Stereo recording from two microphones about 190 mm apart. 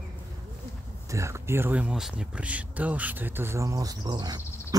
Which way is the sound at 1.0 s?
15° right (ahead or behind).